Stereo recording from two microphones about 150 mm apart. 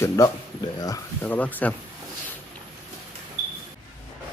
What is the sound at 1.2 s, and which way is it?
Speech, 10° left (ahead or behind).